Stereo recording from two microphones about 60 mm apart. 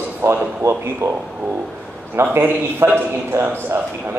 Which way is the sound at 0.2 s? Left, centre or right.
Right.